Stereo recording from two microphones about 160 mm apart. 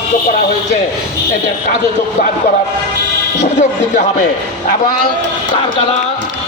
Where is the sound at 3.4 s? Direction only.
45° left (ahead or behind).